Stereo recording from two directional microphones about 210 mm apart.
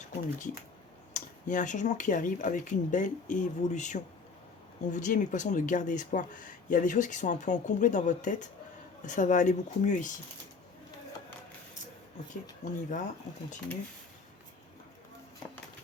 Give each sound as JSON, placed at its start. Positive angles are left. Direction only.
{"t": 1.1, "sound": "speech", "side_deg": 35}
{"t": 12.6, "sound": "speech", "side_deg": 35}